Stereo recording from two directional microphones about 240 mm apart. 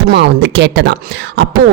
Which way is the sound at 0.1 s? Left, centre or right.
Right.